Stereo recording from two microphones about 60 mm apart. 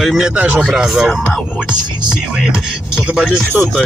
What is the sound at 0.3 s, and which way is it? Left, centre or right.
Speech, right.